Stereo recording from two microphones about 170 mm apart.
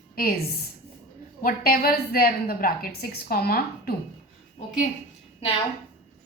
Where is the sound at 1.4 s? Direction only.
55° left (ahead or behind).